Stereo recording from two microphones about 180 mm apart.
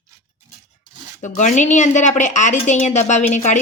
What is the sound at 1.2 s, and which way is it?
Speech, 45° left (ahead or behind).